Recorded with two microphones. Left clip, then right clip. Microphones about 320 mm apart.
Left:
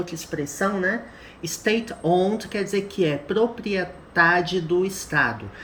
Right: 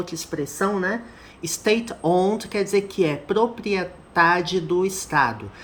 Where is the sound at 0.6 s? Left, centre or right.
Right.